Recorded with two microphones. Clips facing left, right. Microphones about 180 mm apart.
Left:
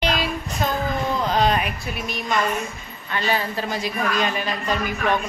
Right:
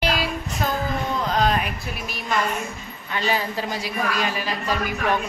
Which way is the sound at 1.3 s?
Centre (ahead or behind).